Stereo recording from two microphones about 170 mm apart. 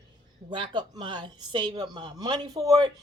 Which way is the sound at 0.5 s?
30° right (ahead or behind).